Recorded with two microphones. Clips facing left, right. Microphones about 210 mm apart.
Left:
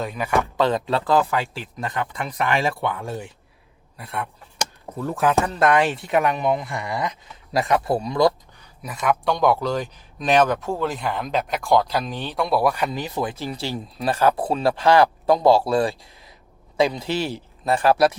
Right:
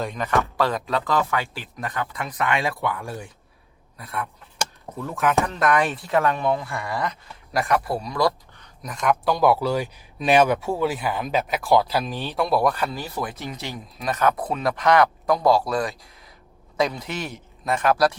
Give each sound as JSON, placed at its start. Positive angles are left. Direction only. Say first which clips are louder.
{"t": 0.0, "sound": "speech", "louder": "left 1 dB", "side_deg": 5}
{"t": 1.4, "sound": "speech", "louder": "left 2 dB", "side_deg": 0}
{"t": 1.8, "sound": "speech", "louder": "left 2 dB", "side_deg": 25}
{"t": 3.9, "sound": "a sound", "louder": "left 1 dB", "side_deg": 25}
{"t": 5.5, "sound": "speech", "louder": "left 3 dB", "side_deg": 30}
{"t": 8.6, "sound": "speech", "louder": "even", "side_deg": 5}
{"t": 12.7, "sound": "a man's voice", "louder": "left 3 dB", "side_deg": 15}